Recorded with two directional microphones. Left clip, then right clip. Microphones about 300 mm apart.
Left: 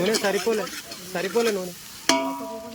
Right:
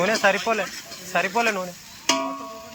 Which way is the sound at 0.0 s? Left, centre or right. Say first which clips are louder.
Right 3 dB; centre.